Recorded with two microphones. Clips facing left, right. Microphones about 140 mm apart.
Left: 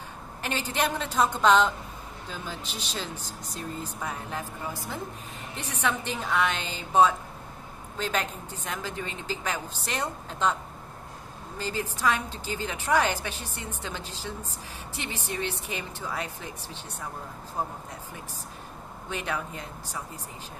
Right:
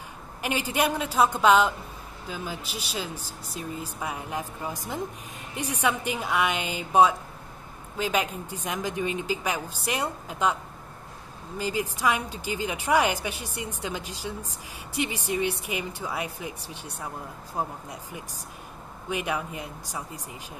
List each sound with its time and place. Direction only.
0.4 s a woman's voice: 10° right (ahead or behind)
19.0 s a woman's voice: 10° right (ahead or behind)